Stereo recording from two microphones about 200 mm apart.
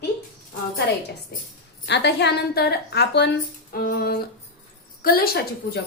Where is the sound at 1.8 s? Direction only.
60° left (ahead or behind).